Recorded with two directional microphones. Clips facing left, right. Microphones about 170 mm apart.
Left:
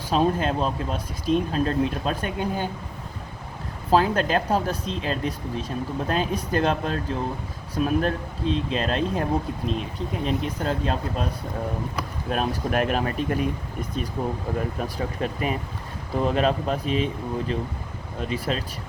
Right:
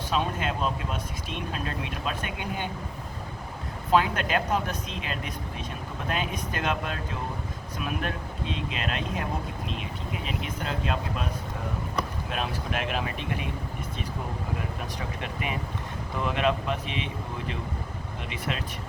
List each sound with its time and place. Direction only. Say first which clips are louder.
0.1 s speech: left 7 dB; 35° left (ahead or behind)
3.9 s speech: left 4 dB; 35° left (ahead or behind)
10.2 s speech: left 8 dB; 35° left (ahead or behind)
12.3 s speech: left 11 dB; 45° left (ahead or behind)
14.9 s speech: left 6 dB; 35° left (ahead or behind)
18.2 s speech: left 7 dB; 35° left (ahead or behind)